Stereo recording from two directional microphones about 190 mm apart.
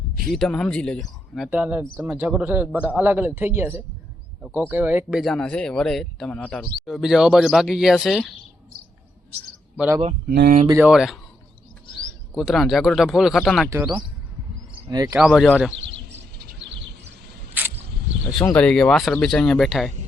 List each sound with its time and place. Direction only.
0.3 s speech: centre (ahead or behind)
1.5 s a man's voice: 10° right (ahead or behind)
5.2 s speech: 5° left (ahead or behind)
9.7 s a man's voice: 10° right (ahead or behind)
10.2 s speech: 55° right (ahead or behind)
10.8 s speech: centre (ahead or behind)
12.3 s speech: centre (ahead or behind)
13.7 s a man's voice: 15° right (ahead or behind)
15.2 s speech: centre (ahead or behind)
15.7 s a sound: 70° right (ahead or behind)
17.6 s a sound: 10° right (ahead or behind)
18.4 s speech: 10° left (ahead or behind)